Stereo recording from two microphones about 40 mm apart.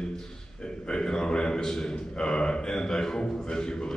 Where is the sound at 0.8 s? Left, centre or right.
Left.